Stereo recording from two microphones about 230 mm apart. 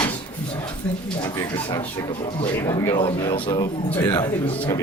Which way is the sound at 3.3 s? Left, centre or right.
Centre.